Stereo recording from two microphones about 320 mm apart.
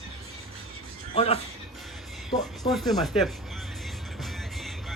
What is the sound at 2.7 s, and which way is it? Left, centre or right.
Speech, centre.